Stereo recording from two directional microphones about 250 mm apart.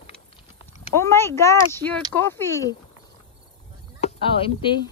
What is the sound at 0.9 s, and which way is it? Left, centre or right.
Speech, centre.